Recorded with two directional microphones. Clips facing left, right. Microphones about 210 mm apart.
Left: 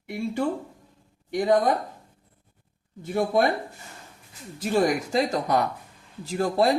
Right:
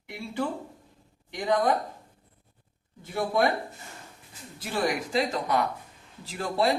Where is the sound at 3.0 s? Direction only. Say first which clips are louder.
Left 3 dB; 50° left (ahead or behind).